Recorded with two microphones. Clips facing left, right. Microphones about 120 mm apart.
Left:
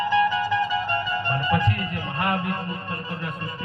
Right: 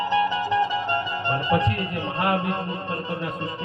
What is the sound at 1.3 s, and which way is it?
Music, 25° right (ahead or behind).